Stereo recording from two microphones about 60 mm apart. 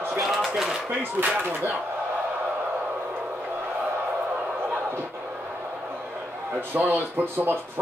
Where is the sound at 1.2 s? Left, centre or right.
Right.